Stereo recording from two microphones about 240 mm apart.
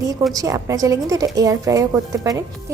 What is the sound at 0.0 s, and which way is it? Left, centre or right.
A woman's voice, centre.